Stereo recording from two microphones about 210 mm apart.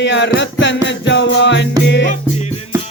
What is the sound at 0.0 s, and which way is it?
Music, 60° left (ahead or behind).